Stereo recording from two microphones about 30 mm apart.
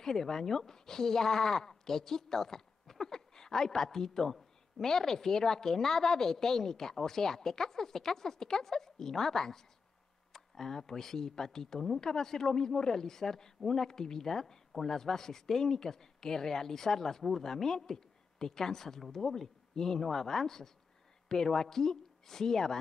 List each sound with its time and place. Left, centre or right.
0.0 s speech: centre